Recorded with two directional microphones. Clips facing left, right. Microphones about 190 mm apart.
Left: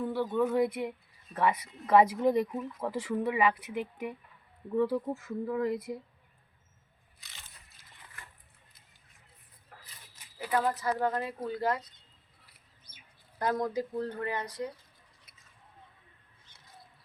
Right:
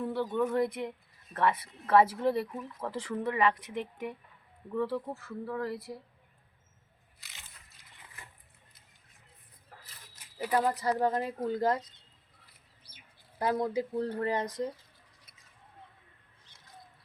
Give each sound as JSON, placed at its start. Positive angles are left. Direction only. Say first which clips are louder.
{"t": 0.0, "sound": "speech", "louder": "left 1 dB", "side_deg": 0}
{"t": 10.4, "sound": "speech", "louder": "right 1 dB", "side_deg": -10}
{"t": 10.7, "sound": "speech", "louder": "right 1 dB", "side_deg": -35}
{"t": 11.0, "sound": "speech", "louder": "right 2 dB", "side_deg": -20}
{"t": 13.4, "sound": "speech", "louder": "right 1 dB", "side_deg": -25}